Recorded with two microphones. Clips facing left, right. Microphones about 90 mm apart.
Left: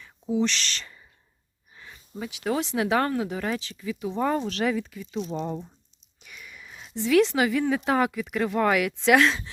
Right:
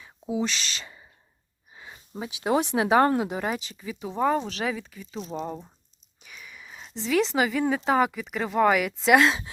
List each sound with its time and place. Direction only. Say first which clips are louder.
0.0 s speech: left 3 dB; 10° right (ahead or behind)
1.7 s speech: right 1 dB; 20° right (ahead or behind)
4.1 s speech: right 2 dB; 5° right (ahead or behind)
6.2 s a sound: even; centre (ahead or behind)
7.9 s speech: right 1 dB; 5° right (ahead or behind)